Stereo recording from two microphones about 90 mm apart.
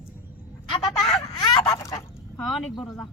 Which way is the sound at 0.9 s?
5° left (ahead or behind).